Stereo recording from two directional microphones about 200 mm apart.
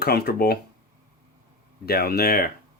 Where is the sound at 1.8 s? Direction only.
50° left (ahead or behind).